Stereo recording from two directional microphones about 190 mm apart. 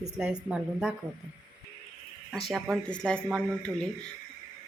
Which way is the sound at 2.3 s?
Centre (ahead or behind).